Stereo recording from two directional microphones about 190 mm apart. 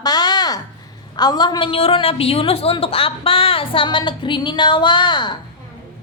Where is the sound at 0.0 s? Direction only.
20° left (ahead or behind).